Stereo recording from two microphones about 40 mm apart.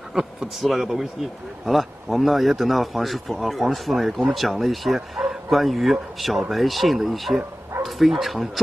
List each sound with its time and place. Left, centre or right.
0.1 s a man's voice: centre